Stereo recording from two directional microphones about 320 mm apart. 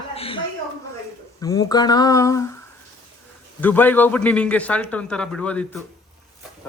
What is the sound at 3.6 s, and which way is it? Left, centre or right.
A man's voice, centre.